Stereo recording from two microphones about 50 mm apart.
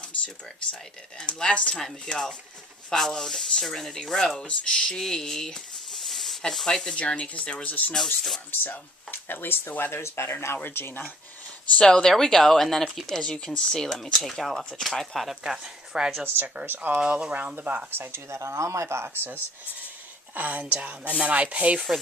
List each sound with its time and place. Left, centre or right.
1.2 s speech: centre
2.0 s speech: centre
4.4 s speech: centre
7.9 s speech: centre
8.6 s speech: left
10.0 s speech: left
10.3 s speech: left
11.8 s speech: centre
15.4 s speech: centre
16.2 s speech: right
17.0 s speech: right
18.1 s speech: right
19.1 s speech: right
20.3 s speech: right